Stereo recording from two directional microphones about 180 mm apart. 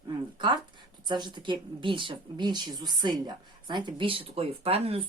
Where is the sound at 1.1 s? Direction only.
25° right (ahead or behind).